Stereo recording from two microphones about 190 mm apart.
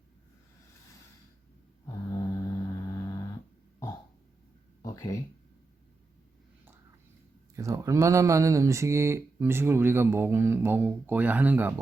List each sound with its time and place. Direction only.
2.0 s vehicle: 20° left (ahead or behind)
4.8 s a sound: 15° left (ahead or behind)
7.5 s speech: 15° right (ahead or behind)